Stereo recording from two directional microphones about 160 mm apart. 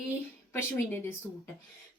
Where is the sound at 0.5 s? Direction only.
15° left (ahead or behind).